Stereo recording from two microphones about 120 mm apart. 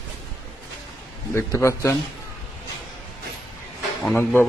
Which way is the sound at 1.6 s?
25° left (ahead or behind).